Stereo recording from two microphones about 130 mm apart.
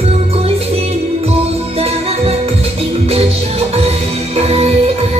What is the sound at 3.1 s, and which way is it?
Music, 50° right (ahead or behind).